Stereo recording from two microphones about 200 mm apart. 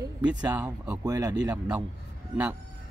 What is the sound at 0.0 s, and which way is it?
Speech, 20° right (ahead or behind).